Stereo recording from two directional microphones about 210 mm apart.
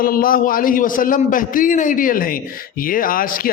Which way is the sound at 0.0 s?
45° left (ahead or behind).